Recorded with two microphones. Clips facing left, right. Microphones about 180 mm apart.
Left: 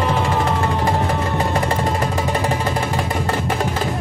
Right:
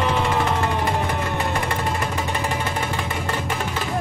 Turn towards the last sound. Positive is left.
turn(degrees=35)  # may be behind; listen again after turning